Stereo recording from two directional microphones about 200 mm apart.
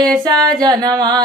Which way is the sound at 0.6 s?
20° right (ahead or behind).